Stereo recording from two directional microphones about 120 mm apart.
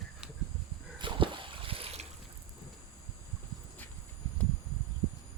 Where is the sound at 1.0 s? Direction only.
45° right (ahead or behind).